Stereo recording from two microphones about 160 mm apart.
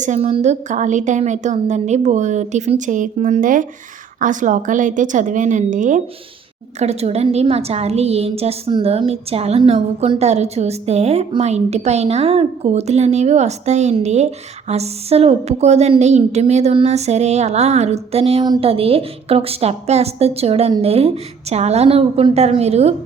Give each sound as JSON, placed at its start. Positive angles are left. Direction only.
{"t": 0.0, "sound": "a woman's voice", "side_deg": -45}
{"t": 6.7, "sound": "a woman's voice", "side_deg": -40}